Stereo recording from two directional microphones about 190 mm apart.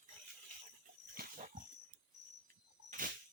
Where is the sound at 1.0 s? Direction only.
50° right (ahead or behind).